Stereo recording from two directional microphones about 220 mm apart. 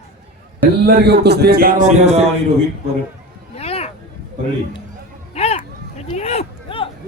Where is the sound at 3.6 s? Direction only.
25° left (ahead or behind).